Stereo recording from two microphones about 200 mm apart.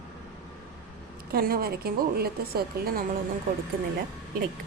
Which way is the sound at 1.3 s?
50° right (ahead or behind).